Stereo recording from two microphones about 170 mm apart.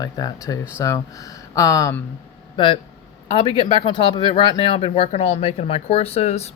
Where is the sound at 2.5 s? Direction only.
30° left (ahead or behind).